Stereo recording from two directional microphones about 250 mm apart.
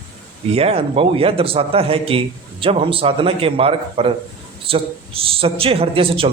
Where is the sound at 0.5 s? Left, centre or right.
Right.